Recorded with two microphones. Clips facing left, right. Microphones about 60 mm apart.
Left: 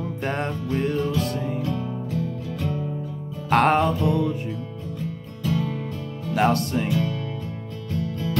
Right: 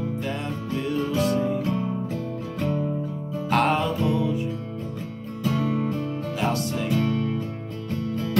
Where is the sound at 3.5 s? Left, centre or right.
Left.